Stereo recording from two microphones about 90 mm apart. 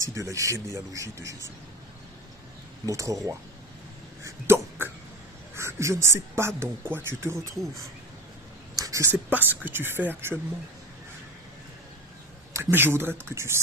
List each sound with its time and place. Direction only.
0.1 s speech: 35° right (ahead or behind)
2.8 s speech: 35° right (ahead or behind)
4.2 s a sound: 30° right (ahead or behind)
5.5 s speech: 30° right (ahead or behind)
8.7 s a sound: 40° right (ahead or behind)
9.0 s speech: 20° right (ahead or behind)
12.7 s speech: 25° right (ahead or behind)